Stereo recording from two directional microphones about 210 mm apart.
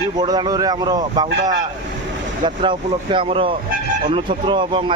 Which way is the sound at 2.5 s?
25° right (ahead or behind).